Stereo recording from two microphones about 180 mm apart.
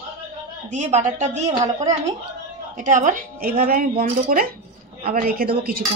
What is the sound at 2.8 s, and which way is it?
A woman's voice, 45° right (ahead or behind).